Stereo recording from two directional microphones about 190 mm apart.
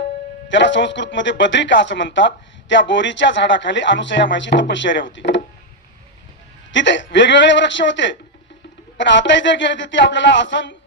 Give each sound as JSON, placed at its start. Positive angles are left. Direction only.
{"t": 0.4, "sound": "speech", "side_deg": 70}
{"t": 6.7, "sound": "speech", "side_deg": 75}